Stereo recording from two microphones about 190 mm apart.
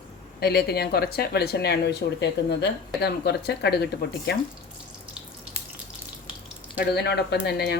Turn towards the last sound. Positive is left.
turn(degrees=60)  # may be behind; listen again after turning